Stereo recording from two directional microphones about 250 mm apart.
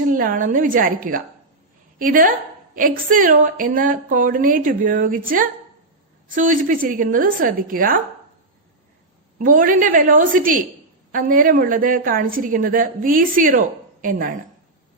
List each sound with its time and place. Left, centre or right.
0.1 s a woman's voice: right
9.4 s a woman's voice: right